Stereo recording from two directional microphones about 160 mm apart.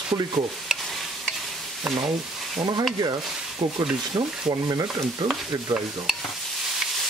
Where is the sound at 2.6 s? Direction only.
30° right (ahead or behind).